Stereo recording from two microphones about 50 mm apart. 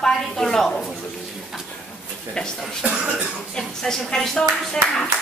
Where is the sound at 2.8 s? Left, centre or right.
Right.